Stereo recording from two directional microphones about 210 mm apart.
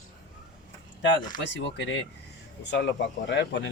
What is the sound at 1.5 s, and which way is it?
Speech, 60° left (ahead or behind).